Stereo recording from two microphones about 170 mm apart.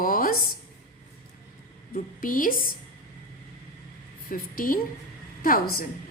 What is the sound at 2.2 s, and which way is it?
Speech, 55° left (ahead or behind).